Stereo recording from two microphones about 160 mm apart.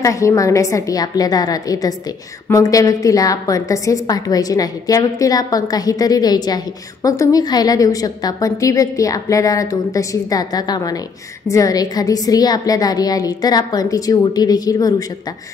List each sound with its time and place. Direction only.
0.0 s a woman's voice: 20° left (ahead or behind)